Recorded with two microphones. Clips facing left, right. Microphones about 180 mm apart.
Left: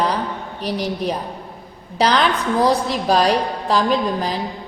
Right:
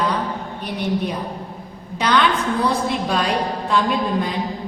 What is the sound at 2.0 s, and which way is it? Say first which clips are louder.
A woman's voice: left 1 dB; 35° left (ahead or behind).